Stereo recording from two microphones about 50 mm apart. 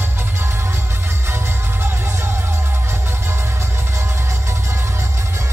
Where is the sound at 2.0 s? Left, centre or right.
Right.